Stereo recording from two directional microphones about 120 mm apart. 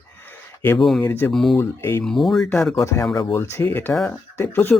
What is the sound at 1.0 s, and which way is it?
Speech, 15° left (ahead or behind).